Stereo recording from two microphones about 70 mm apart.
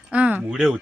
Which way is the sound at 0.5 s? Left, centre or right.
Centre.